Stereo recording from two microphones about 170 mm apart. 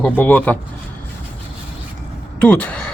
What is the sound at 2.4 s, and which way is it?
Speech, 5° left (ahead or behind).